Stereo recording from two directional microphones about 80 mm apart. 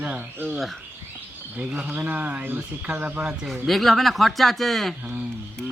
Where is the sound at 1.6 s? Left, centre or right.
Centre.